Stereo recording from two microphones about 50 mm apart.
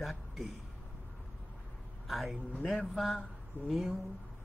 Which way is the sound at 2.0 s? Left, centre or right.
Centre.